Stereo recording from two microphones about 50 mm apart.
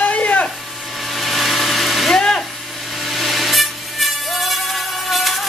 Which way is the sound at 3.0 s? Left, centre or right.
Centre.